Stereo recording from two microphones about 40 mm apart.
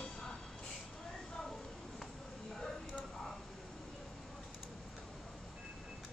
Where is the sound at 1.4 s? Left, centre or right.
Centre.